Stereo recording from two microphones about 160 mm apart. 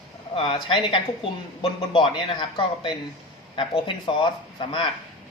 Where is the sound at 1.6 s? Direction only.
30° left (ahead or behind).